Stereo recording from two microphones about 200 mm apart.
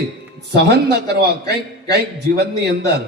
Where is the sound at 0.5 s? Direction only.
55° right (ahead or behind).